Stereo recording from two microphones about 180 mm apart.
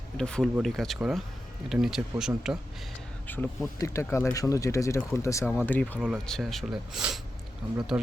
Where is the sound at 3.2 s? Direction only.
10° left (ahead or behind).